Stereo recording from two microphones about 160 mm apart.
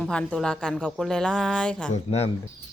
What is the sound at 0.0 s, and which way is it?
Speech, 5° left (ahead or behind).